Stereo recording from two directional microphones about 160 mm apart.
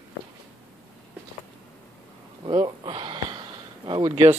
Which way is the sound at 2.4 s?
30° right (ahead or behind).